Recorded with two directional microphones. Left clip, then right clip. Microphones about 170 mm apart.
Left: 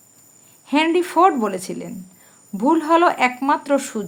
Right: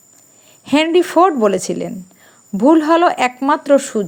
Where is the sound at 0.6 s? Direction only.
35° right (ahead or behind).